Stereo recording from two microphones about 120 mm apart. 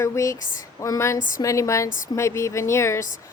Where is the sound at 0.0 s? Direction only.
25° left (ahead or behind).